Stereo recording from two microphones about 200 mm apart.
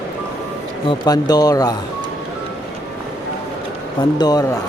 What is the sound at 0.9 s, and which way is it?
Speech, 20° left (ahead or behind).